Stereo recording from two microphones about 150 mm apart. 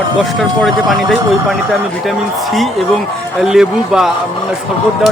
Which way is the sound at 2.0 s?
Centre (ahead or behind).